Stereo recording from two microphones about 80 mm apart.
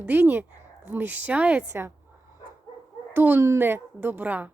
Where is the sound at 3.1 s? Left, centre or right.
Right.